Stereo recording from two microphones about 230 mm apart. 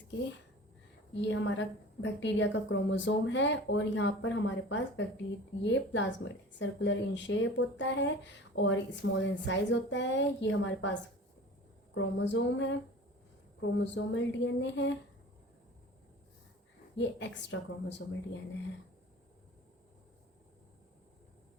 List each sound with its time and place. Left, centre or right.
1.1 s a woman's voice: left
11.9 s a woman's voice: left
17.0 s a woman's voice: left